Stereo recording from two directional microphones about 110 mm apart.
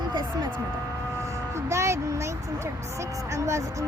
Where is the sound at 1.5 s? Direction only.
25° right (ahead or behind).